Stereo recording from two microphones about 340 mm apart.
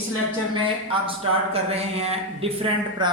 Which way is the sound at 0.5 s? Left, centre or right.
Centre.